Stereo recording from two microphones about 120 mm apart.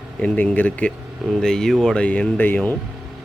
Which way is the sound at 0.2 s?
15° left (ahead or behind).